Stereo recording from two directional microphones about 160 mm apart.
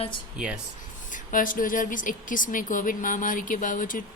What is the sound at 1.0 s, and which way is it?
A woman's voice, 55° left (ahead or behind).